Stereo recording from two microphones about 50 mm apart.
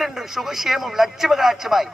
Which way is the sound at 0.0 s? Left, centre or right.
Centre.